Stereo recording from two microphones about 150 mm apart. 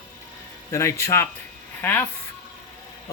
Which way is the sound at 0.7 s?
20° left (ahead or behind).